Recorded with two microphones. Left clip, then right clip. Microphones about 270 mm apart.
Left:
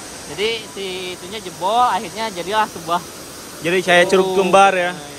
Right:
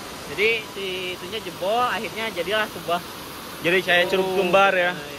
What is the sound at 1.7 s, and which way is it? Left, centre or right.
Speech, left.